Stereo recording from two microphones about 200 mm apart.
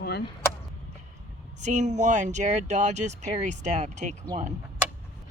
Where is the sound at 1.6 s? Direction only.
35° right (ahead or behind).